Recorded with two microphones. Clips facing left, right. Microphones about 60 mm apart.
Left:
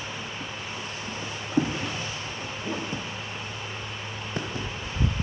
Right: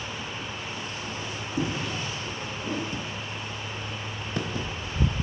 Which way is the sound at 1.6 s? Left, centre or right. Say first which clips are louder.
Left 5 dB; left.